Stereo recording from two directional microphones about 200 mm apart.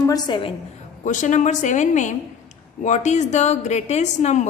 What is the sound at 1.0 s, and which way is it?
A woman's voice, 35° left (ahead or behind).